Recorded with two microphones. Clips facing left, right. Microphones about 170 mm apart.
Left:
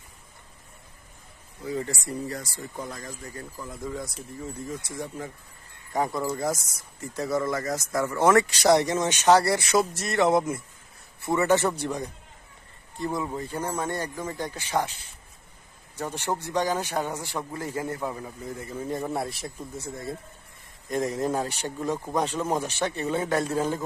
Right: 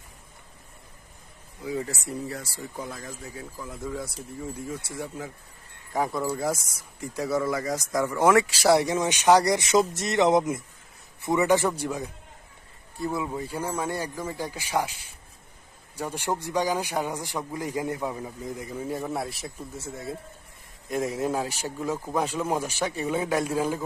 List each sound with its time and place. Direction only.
1.6 s speech: 5° right (ahead or behind)
13.1 s speech: 10° right (ahead or behind)
19.0 s speech: centre (ahead or behind)